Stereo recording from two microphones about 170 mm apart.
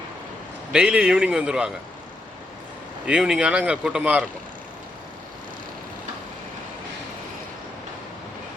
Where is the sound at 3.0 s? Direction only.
5° right (ahead or behind).